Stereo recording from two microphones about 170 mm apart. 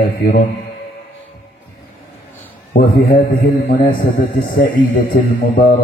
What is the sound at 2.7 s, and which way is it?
A man's voice, 60° left (ahead or behind).